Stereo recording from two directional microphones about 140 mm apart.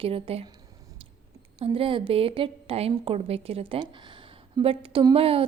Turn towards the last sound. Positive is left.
turn(degrees=-45)  # may be behind; listen again after turning